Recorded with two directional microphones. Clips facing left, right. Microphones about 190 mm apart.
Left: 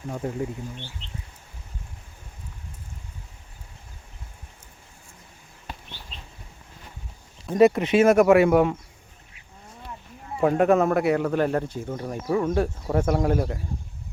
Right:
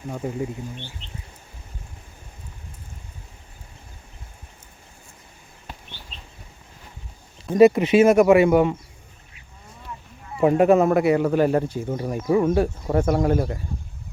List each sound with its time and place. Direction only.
0.1 s speech: 5° right (ahead or behind)
1.0 s speech: 15° right (ahead or behind)
7.4 s speech: 5° right (ahead or behind)
10.4 s speech: 5° right (ahead or behind)